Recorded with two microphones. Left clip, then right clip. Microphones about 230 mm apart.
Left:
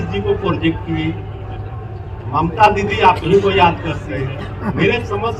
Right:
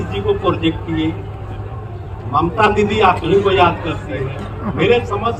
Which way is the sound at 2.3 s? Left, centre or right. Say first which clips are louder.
Left 1 dB; centre.